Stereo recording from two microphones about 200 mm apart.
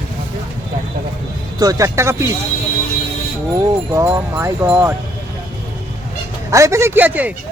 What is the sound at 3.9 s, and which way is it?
Speech, 15° right (ahead or behind).